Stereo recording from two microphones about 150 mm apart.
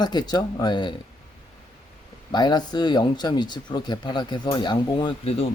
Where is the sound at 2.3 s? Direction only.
30° left (ahead or behind).